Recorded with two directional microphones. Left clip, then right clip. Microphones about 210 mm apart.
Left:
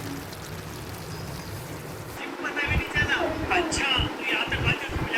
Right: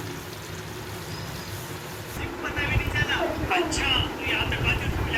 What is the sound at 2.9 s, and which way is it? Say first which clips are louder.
Vehicle: left 2 dB; 10° left (ahead or behind).